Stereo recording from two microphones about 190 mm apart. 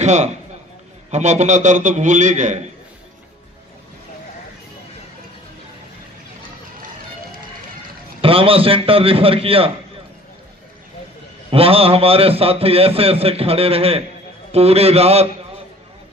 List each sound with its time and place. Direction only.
0.0 s a man's voice: 35° right (ahead or behind)
8.2 s a man's voice: 30° right (ahead or behind)
11.5 s a man's voice: 30° right (ahead or behind)